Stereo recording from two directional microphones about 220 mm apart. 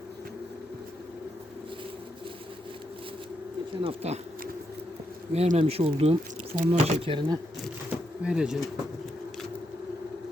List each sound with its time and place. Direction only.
3.8 s speech: 25° right (ahead or behind)
5.3 s speech: 30° right (ahead or behind)
7.9 s pigeon: 5° right (ahead or behind)